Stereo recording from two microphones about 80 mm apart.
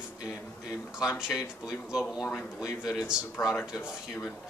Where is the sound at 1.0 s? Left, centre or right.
Centre.